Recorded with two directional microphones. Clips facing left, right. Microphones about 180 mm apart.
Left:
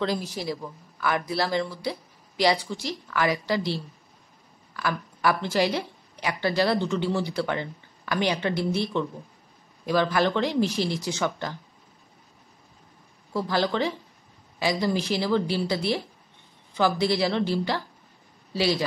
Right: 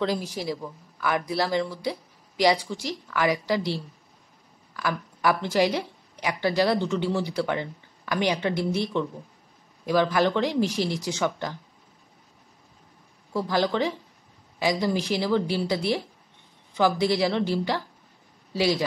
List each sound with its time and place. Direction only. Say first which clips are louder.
0.0 s a woman's voice: right 1 dB; 15° right (ahead or behind)
13.3 s a woman's voice: right 1 dB; 15° right (ahead or behind)